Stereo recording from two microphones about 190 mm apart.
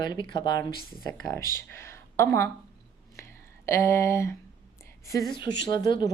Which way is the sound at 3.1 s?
15° left (ahead or behind).